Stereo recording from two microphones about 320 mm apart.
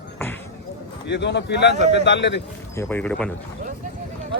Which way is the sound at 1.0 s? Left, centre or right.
Left.